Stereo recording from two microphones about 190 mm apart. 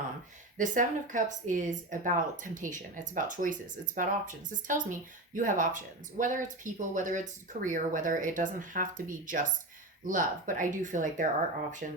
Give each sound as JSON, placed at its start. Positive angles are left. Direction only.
{"t": 0.5, "sound": "speech", "side_deg": -45}